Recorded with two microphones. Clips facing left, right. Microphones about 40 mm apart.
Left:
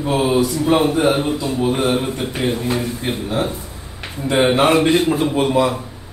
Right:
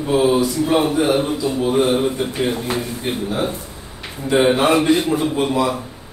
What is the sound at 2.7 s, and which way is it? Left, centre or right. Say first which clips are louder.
Speech: left 1 dB; left.